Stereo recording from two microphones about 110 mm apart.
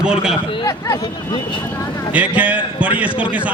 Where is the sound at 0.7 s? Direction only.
30° left (ahead or behind).